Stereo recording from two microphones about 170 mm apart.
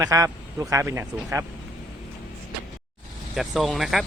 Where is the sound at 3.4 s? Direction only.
Centre (ahead or behind).